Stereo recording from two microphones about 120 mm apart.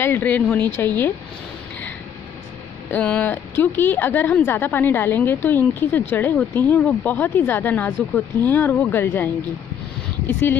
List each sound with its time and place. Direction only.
0.0 s speech: 15° left (ahead or behind)
2.9 s speech: 10° left (ahead or behind)